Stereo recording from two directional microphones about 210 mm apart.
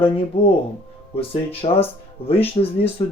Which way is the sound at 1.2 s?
25° left (ahead or behind).